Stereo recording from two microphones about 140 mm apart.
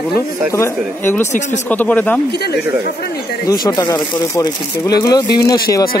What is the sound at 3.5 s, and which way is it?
Speech, 25° left (ahead or behind).